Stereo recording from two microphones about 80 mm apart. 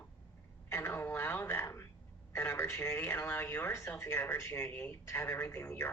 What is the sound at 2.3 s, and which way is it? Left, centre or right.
A woman's voice, left.